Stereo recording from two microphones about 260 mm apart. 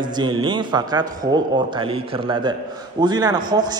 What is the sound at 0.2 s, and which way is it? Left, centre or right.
A man's voice, centre.